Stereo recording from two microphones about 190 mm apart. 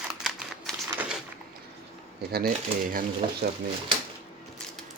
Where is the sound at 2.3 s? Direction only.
50° right (ahead or behind).